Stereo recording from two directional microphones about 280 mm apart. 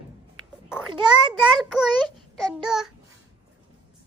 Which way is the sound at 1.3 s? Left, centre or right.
Centre.